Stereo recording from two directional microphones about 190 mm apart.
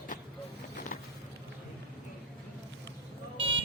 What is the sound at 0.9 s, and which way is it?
Vehicle, 50° left (ahead or behind).